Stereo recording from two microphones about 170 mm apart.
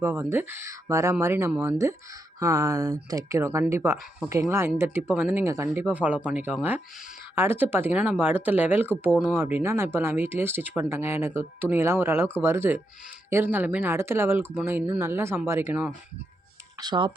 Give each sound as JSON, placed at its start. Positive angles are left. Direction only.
{"t": 0.0, "sound": "speech", "side_deg": -15}
{"t": 16.7, "sound": "speech", "side_deg": -25}